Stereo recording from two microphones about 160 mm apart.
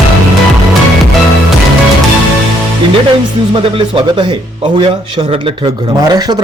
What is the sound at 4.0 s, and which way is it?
Speech, 30° right (ahead or behind).